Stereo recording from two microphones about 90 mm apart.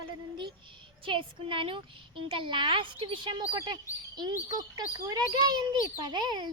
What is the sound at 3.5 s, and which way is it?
A child's voice, 50° right (ahead or behind).